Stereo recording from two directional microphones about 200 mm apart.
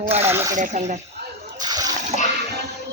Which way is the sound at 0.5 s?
40° right (ahead or behind).